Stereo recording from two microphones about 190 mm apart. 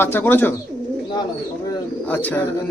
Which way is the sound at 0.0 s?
10° left (ahead or behind).